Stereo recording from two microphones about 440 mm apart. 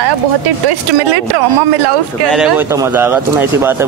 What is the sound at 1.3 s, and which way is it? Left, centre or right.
Speech, right.